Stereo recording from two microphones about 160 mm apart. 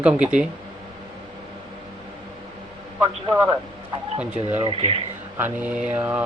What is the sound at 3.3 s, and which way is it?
Speech, 20° right (ahead or behind).